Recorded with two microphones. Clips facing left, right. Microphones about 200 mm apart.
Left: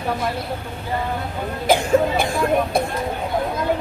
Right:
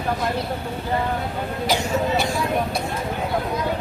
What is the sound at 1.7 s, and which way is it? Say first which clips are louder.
Speech: left 6 dB; 55° left (ahead or behind).